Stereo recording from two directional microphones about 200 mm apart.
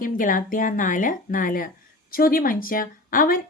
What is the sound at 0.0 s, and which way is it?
A woman's voice, 40° left (ahead or behind).